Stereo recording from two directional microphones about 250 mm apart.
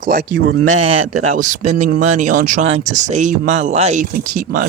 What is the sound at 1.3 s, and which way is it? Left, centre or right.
Speech, right.